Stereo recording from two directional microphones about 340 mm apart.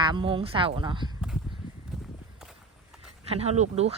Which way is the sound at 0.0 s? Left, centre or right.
Centre.